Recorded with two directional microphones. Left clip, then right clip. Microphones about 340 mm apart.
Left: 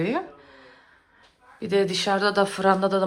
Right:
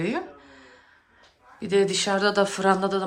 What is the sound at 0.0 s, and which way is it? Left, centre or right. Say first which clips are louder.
Speech: left 2 dB; centre.